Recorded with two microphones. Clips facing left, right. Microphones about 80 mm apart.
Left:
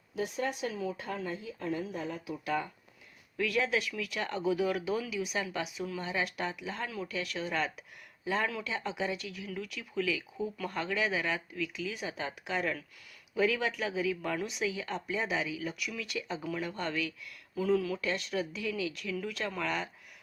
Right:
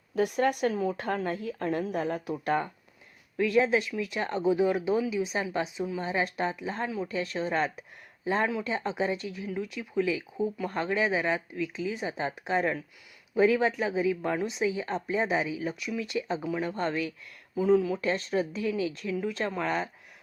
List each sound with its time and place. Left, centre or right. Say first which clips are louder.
0.2 s speech: right 8 dB; right
2.3 s speech: right 4 dB; right
3.3 s a woman's voice: right 6 dB; right